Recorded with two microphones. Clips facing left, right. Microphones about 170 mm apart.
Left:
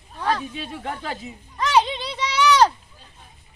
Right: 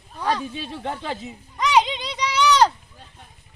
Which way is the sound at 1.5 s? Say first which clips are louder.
Even; 15° right (ahead or behind).